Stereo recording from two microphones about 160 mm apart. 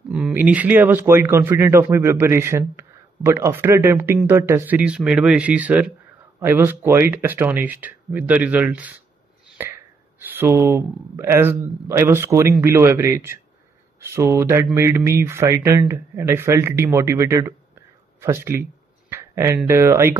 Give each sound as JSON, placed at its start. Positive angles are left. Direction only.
{"t": 0.1, "sound": "speech", "side_deg": -10}